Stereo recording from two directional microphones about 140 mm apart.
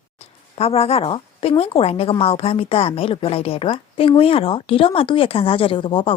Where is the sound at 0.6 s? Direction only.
45° left (ahead or behind).